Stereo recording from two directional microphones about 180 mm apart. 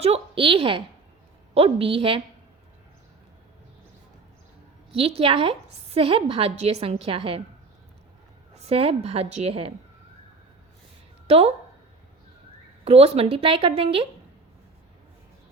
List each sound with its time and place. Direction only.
0.0 s a woman's voice: 35° right (ahead or behind)
4.9 s a woman's voice: 30° right (ahead or behind)
8.5 s a woman's voice: 35° right (ahead or behind)
11.3 s a woman's voice: 35° right (ahead or behind)
12.8 s a woman's voice: 35° right (ahead or behind)